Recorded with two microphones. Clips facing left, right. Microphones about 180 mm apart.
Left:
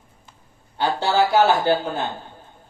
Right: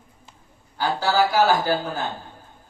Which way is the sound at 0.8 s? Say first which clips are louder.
Left 1 dB; 30° left (ahead or behind).